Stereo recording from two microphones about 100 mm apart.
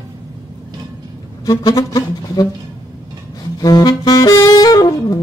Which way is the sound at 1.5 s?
40° left (ahead or behind).